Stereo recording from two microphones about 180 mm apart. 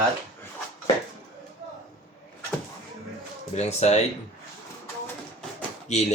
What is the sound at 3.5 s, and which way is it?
Speech, 35° left (ahead or behind).